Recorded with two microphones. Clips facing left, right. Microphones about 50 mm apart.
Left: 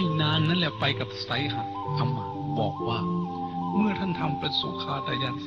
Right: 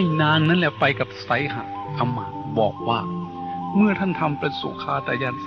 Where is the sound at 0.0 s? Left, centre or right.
Right.